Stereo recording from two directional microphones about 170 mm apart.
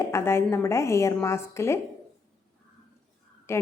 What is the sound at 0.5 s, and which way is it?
A woman's voice, 15° left (ahead or behind).